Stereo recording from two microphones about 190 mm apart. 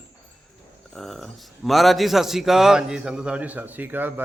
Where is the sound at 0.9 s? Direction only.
Centre (ahead or behind).